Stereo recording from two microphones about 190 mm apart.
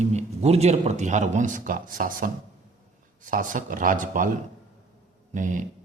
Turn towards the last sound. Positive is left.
turn(degrees=-45)  # may be behind; listen again after turning